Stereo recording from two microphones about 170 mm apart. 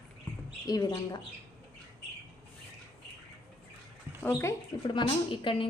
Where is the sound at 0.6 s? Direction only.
20° left (ahead or behind).